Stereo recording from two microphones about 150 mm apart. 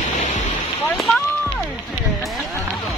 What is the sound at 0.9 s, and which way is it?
Speech, centre (ahead or behind).